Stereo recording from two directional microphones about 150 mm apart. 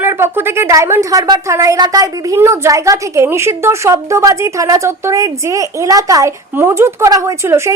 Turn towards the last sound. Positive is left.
turn(degrees=-20)  # may be behind; listen again after turning